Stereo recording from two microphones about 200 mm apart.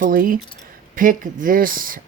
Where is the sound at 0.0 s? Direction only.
45° right (ahead or behind).